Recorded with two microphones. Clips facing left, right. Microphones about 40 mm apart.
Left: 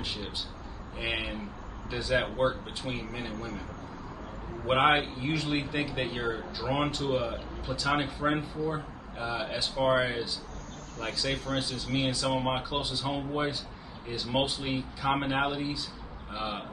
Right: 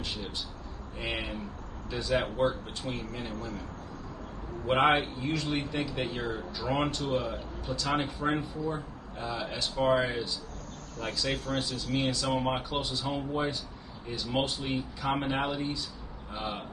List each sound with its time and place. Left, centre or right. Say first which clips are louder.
0.0 s speech: left 1 dB; centre
4.6 s speech: even; centre